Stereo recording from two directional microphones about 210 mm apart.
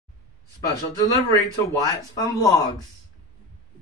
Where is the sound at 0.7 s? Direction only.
20° left (ahead or behind).